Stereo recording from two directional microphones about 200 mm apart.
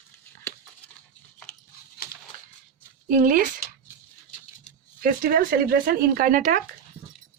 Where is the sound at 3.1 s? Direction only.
45° right (ahead or behind).